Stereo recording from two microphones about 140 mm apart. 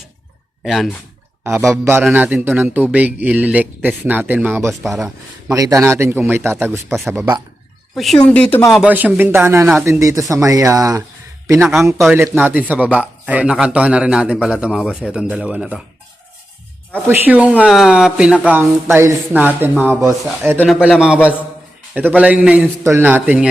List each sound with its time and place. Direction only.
0.6 s speech: centre (ahead or behind)
1.5 s a man's voice: 20° right (ahead or behind)
4.8 s speech: centre (ahead or behind)
5.0 s a man's voice: 25° right (ahead or behind)
7.9 s speech: centre (ahead or behind)
8.7 s a man's voice: 10° right (ahead or behind)
16.9 s a man's voice: 10° right (ahead or behind)
20.7 s a man's voice: 5° right (ahead or behind)
22.8 s a man's voice: 20° right (ahead or behind)
23.0 s a man's voice: 10° right (ahead or behind)